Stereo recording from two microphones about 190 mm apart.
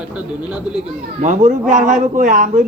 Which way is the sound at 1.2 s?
40° right (ahead or behind).